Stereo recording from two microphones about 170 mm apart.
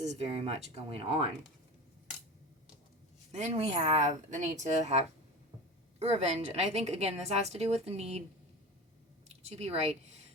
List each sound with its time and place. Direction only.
0.0 s a woman's voice: 40° right (ahead or behind)
3.3 s a woman's voice: 40° right (ahead or behind)
9.3 s speech: 40° right (ahead or behind)